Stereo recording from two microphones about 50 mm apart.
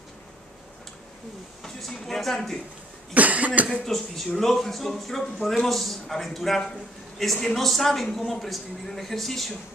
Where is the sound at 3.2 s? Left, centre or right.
Right.